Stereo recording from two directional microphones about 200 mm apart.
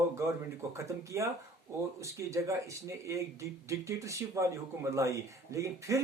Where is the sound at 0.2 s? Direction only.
15° right (ahead or behind).